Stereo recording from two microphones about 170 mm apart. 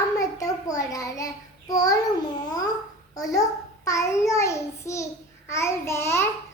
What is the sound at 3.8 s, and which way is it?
Child singing, 20° left (ahead or behind).